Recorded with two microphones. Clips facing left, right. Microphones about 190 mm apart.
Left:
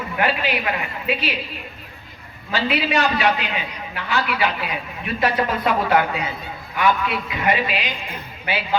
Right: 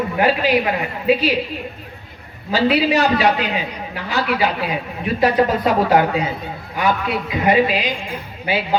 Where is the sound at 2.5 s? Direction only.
35° right (ahead or behind).